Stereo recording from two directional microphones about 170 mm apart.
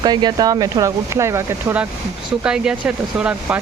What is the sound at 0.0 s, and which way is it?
Speech, 25° right (ahead or behind).